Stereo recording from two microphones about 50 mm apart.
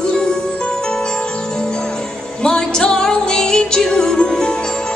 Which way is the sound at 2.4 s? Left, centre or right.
Centre.